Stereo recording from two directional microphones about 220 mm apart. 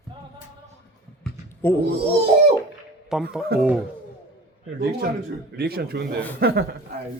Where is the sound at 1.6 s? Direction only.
10° left (ahead or behind).